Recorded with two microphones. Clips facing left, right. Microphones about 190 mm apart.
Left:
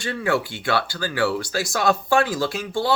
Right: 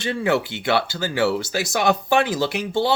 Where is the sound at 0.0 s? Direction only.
20° right (ahead or behind).